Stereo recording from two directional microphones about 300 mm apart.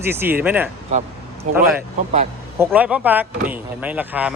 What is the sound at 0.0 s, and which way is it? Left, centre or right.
A man's voice, centre.